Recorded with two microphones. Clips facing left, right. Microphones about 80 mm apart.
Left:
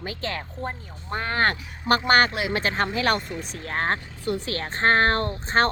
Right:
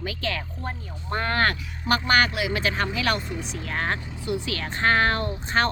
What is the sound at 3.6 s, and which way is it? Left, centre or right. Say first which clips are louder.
Speech: left 3 dB; left.